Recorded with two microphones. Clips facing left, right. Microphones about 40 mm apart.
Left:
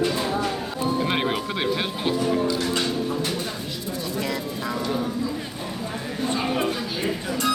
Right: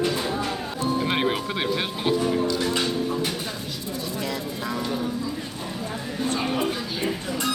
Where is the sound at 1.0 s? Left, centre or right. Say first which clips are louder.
Even; centre.